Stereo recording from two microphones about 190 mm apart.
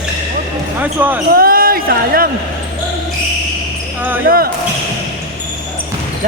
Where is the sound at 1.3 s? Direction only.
50° right (ahead or behind).